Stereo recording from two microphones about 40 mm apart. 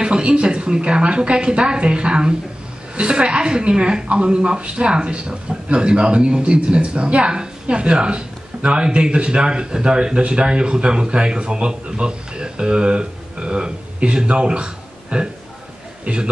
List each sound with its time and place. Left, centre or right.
0.0 s a woman's voice: right